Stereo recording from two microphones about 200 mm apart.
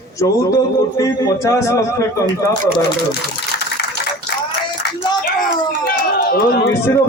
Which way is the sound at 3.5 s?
55° left (ahead or behind).